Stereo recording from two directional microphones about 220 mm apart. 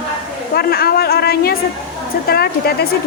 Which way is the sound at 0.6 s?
45° left (ahead or behind).